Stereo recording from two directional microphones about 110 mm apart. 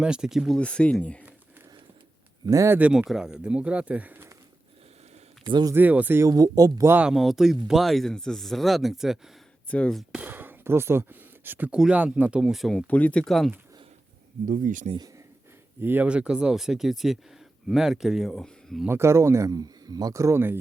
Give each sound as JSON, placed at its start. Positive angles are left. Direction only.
{"t": 0.0, "sound": "speech", "side_deg": -5}
{"t": 0.6, "sound": "speech", "side_deg": 10}
{"t": 2.5, "sound": "speech", "side_deg": -30}
{"t": 2.7, "sound": "speech", "side_deg": -10}
{"t": 5.5, "sound": "speech", "side_deg": -40}
{"t": 5.7, "sound": "speech", "side_deg": -15}
{"t": 6.2, "sound": "speech", "side_deg": -35}
{"t": 7.0, "sound": "speech", "side_deg": -5}
{"t": 9.6, "sound": "speech", "side_deg": 10}
{"t": 10.0, "sound": "speech", "side_deg": -10}
{"t": 12.9, "sound": "speech", "side_deg": 15}
{"t": 15.8, "sound": "speech", "side_deg": -15}
{"t": 18.9, "sound": "speech", "side_deg": -25}